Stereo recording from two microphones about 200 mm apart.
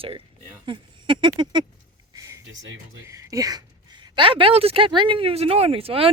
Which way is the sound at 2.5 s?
70° right (ahead or behind).